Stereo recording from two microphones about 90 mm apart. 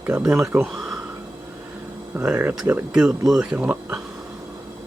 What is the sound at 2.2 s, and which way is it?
Speech, 10° right (ahead or behind).